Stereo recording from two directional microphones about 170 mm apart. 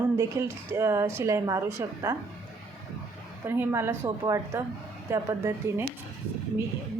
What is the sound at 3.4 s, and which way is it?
A woman's voice, 15° right (ahead or behind).